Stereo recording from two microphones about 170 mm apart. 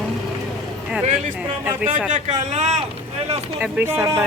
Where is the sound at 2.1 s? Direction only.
45° right (ahead or behind).